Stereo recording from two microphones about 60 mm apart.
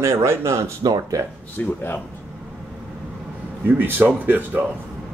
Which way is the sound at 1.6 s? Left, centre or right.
Left.